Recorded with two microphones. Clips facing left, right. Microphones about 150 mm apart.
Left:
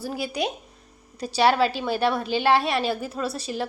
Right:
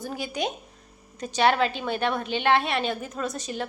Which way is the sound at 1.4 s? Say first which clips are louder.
Left 2 dB; 10° left (ahead or behind).